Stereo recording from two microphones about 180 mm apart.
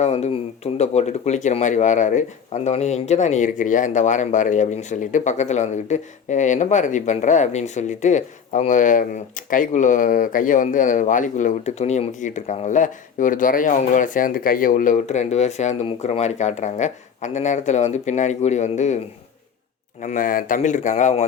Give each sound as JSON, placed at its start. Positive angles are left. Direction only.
{"t": 0.0, "sound": "speech", "side_deg": 35}
{"t": 20.0, "sound": "speech", "side_deg": 45}